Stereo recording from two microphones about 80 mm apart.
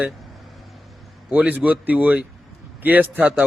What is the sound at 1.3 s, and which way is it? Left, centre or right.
A man's voice, centre.